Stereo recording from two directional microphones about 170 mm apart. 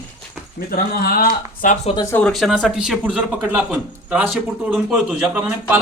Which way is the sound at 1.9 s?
20° left (ahead or behind).